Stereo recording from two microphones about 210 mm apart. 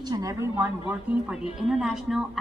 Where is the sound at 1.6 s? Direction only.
Centre (ahead or behind).